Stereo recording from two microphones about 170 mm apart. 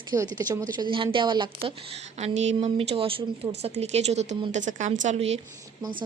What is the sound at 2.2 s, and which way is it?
A woman's voice, 40° right (ahead or behind).